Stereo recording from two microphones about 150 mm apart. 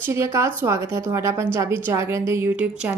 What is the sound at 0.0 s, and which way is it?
Speech, 15° right (ahead or behind).